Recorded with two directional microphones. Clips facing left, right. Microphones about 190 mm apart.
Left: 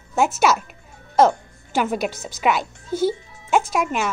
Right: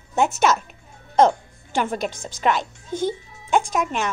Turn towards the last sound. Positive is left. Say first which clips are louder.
# left 1 dB
turn(degrees=5)  # may be behind; listen again after turning